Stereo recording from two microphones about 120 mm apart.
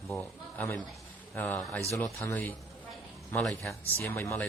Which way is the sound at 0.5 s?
25° left (ahead or behind).